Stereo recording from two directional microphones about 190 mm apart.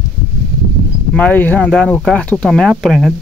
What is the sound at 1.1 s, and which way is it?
Speech, 10° left (ahead or behind).